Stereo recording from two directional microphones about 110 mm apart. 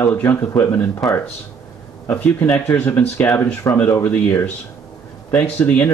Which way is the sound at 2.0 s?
15° left (ahead or behind).